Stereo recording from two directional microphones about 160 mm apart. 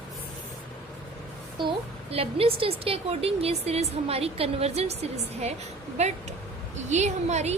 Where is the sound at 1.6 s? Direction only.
35° right (ahead or behind).